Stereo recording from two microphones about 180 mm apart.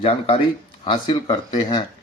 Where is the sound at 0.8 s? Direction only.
25° left (ahead or behind).